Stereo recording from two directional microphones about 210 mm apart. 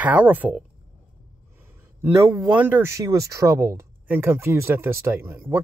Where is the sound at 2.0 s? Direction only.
15° right (ahead or behind).